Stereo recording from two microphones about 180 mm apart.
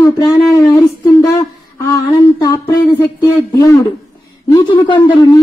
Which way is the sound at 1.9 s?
20° left (ahead or behind).